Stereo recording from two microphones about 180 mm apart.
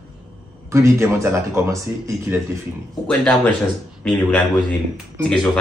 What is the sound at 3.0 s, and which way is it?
Speech, 10° left (ahead or behind).